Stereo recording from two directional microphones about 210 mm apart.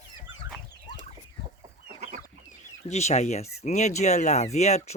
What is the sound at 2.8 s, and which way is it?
Speech, 35° left (ahead or behind).